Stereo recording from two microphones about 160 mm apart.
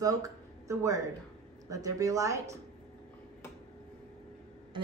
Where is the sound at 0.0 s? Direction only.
20° right (ahead or behind).